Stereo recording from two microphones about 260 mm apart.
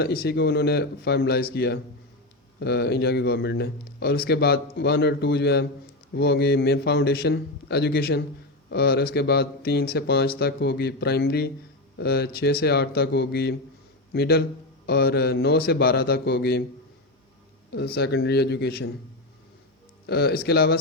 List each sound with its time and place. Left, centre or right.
0.0 s speech: left
17.7 s speech: left
20.1 s speech: left